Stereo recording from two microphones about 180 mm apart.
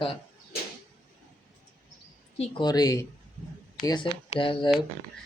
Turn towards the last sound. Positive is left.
turn(degrees=30)  # may be behind; listen again after turning